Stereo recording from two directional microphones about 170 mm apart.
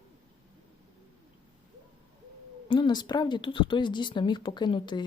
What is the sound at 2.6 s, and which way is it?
A woman's voice, 25° left (ahead or behind).